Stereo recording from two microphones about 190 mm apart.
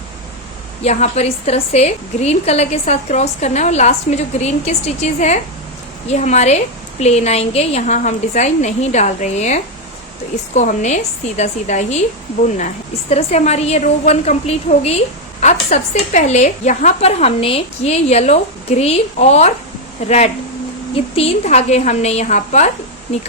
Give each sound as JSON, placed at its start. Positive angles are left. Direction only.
{"t": 0.8, "sound": "a woman's voice", "side_deg": 35}
{"t": 13.1, "sound": "a woman's voice", "side_deg": 35}